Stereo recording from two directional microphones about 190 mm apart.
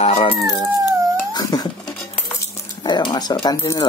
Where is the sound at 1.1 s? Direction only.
20° left (ahead or behind).